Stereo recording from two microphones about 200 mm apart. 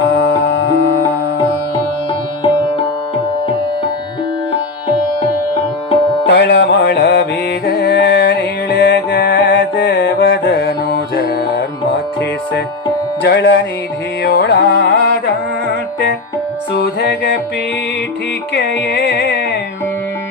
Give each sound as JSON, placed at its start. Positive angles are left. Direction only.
{"t": 0.1, "sound": "music", "side_deg": 60}
{"t": 6.2, "sound": "music", "side_deg": 60}
{"t": 13.2, "sound": "music", "side_deg": 60}
{"t": 14.3, "sound": "carnatic music", "side_deg": 55}
{"t": 16.8, "sound": "music", "side_deg": 55}
{"t": 18.5, "sound": "carnatic music", "side_deg": 60}